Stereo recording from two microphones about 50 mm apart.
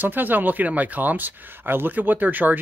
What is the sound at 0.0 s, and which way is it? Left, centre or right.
Speech, right.